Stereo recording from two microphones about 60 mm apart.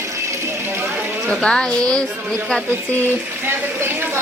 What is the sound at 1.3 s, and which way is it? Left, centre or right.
Speech, centre.